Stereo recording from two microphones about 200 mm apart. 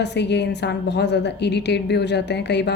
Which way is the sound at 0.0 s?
60° left (ahead or behind).